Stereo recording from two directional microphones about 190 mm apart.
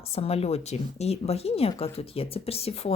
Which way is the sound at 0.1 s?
30° left (ahead or behind).